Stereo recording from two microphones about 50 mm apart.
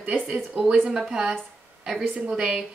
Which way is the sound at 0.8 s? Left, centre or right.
Centre.